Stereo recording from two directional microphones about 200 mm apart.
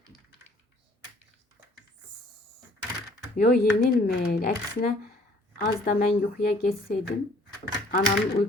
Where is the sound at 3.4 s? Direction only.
50° left (ahead or behind).